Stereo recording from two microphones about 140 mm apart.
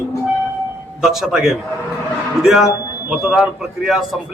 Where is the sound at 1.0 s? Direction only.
Centre (ahead or behind).